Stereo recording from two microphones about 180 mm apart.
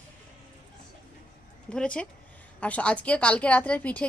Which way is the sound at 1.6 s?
5° left (ahead or behind).